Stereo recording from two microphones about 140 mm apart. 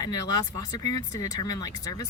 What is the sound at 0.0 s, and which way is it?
Speech, 25° left (ahead or behind).